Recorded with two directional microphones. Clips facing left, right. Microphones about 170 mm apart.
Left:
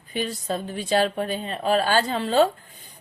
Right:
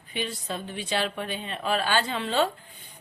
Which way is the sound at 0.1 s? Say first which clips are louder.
Left 5 dB; 40° left (ahead or behind).